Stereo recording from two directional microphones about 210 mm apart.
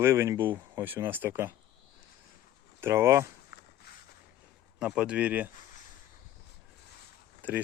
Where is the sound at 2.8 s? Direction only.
10° right (ahead or behind).